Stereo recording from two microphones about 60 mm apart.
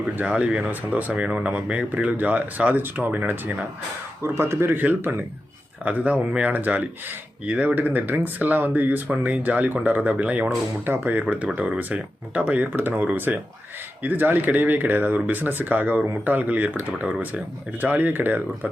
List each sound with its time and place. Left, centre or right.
0.2 s speech: right
4.2 s speech: right
5.8 s speech: right